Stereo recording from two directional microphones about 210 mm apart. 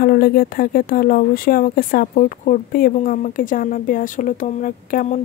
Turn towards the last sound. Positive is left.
turn(degrees=40)  # may be behind; listen again after turning